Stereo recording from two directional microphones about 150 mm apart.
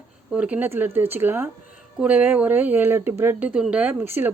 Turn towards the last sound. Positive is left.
turn(degrees=-15)  # may be behind; listen again after turning